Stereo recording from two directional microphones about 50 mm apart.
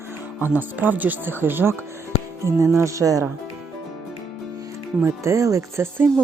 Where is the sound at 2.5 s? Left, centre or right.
Right.